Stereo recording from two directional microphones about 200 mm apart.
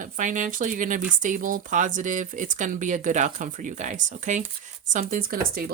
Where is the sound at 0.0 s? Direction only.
40° right (ahead or behind).